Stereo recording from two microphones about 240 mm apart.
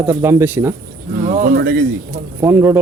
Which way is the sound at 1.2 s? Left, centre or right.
Right.